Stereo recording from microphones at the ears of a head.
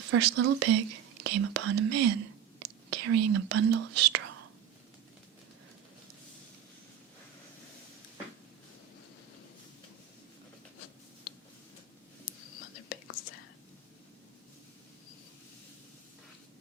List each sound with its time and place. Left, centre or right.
0.0 s speech: right
10.8 s a sound: left
12.2 s whispering: left